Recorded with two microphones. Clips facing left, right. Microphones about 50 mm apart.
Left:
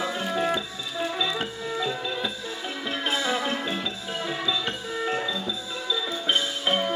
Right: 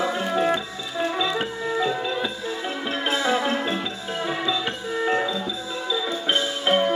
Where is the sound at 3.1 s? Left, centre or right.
Centre.